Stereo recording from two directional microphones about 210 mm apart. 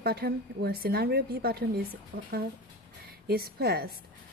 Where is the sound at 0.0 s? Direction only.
50° right (ahead or behind).